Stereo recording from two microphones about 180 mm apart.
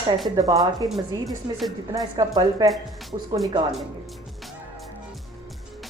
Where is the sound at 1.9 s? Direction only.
20° right (ahead or behind).